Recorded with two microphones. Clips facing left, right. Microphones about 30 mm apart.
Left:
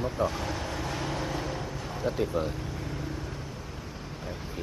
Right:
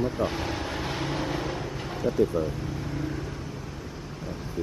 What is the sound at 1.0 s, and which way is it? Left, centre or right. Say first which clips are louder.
Vehicle: right 3 dB; right.